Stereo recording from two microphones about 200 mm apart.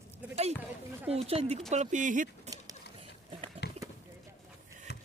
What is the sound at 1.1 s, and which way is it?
Speech, 30° right (ahead or behind).